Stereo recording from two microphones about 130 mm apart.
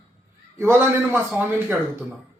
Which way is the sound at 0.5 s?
20° right (ahead or behind).